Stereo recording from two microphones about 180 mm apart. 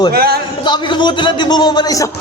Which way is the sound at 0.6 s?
25° left (ahead or behind).